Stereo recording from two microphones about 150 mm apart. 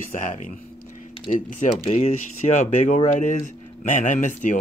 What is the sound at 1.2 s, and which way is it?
Speech, 60° left (ahead or behind).